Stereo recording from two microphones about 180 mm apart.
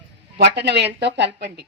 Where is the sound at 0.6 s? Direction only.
70° right (ahead or behind).